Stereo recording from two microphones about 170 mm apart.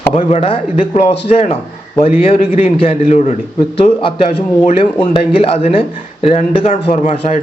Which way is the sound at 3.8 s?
35° left (ahead or behind).